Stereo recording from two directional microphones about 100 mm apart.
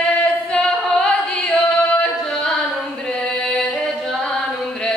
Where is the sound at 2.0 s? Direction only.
5° left (ahead or behind).